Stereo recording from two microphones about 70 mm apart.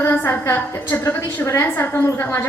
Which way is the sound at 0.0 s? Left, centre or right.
Left.